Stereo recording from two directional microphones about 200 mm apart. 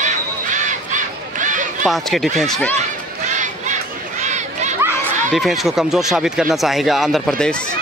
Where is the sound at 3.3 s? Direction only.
40° right (ahead or behind).